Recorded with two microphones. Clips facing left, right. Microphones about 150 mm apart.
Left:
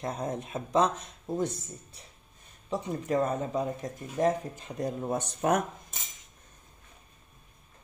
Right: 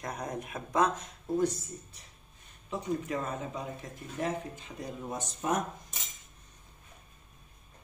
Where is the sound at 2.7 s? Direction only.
40° left (ahead or behind); by 5.6 s 65° left (ahead or behind).